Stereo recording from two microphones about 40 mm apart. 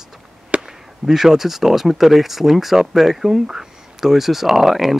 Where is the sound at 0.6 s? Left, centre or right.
Centre.